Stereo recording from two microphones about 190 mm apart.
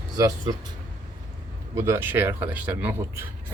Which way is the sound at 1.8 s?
15° right (ahead or behind).